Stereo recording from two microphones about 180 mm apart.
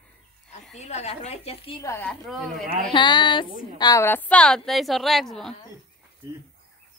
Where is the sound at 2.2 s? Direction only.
Centre (ahead or behind).